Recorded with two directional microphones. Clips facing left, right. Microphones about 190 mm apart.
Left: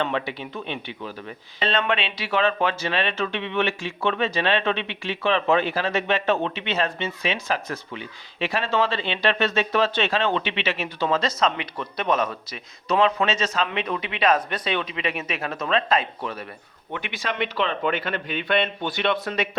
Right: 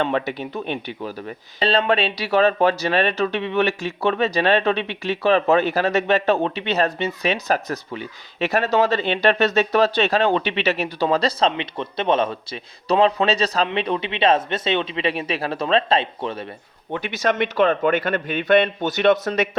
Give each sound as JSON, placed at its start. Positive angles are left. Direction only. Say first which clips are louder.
{"t": 0.0, "sound": "a man's voice", "louder": "right 4 dB", "side_deg": -45}
{"t": 16.9, "sound": "a man's voice", "louder": "right 8 dB", "side_deg": -40}